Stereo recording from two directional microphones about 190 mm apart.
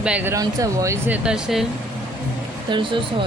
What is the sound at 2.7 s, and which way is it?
Speech, 25° right (ahead or behind).